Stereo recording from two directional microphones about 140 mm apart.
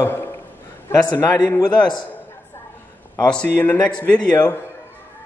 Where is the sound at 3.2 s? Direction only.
10° left (ahead or behind).